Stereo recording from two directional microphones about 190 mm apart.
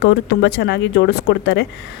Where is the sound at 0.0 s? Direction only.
65° left (ahead or behind).